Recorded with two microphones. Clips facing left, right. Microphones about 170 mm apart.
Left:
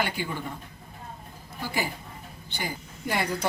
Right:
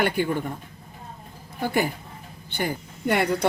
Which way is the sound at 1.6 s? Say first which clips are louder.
Right 7 dB; 55° right (ahead or behind).